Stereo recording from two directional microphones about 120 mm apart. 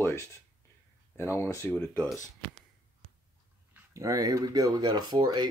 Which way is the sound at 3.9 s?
30° right (ahead or behind).